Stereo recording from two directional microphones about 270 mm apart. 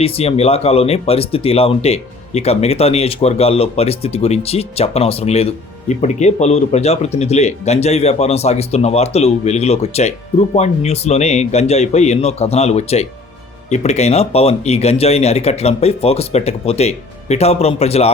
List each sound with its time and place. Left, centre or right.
0.0 s speech: left